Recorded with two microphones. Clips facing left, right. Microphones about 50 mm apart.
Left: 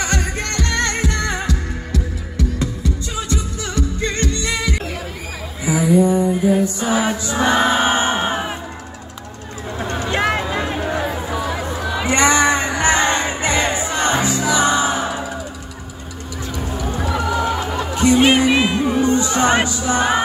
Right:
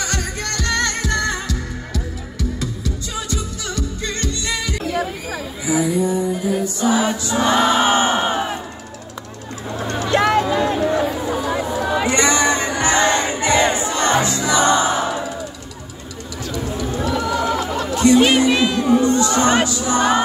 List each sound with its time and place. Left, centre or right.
0.0 s music: left
5.7 s mantra: left
7.5 s a sound: centre
9.8 s a sound: left
12.1 s crowd: left
13.6 s music: centre
17.5 s music: left